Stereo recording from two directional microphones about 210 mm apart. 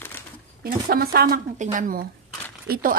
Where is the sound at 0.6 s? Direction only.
45° right (ahead or behind).